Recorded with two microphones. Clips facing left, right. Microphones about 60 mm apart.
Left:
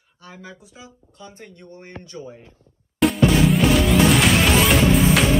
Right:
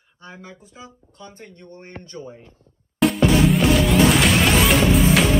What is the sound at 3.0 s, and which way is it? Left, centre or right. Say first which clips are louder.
Music: even; centre.